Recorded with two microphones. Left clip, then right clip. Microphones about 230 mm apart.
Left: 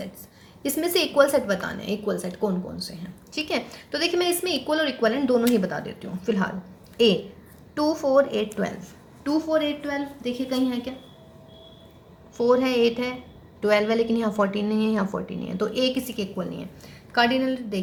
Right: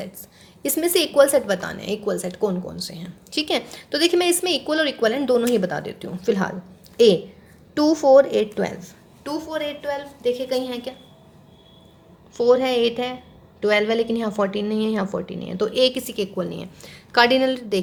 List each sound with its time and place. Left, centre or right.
0.6 s a woman's voice: right
12.4 s a woman's voice: right